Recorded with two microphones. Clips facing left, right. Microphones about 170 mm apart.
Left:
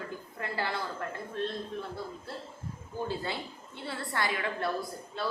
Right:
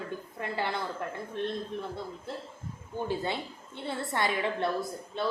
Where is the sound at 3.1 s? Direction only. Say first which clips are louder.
Right 3 dB; 20° right (ahead or behind).